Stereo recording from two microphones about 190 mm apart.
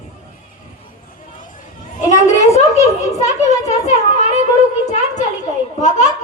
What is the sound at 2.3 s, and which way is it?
A child's voice, 35° left (ahead or behind).